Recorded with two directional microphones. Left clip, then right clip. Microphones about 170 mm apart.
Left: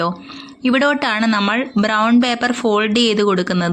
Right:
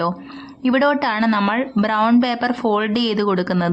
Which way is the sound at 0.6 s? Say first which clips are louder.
Left 1 dB; 20° left (ahead or behind).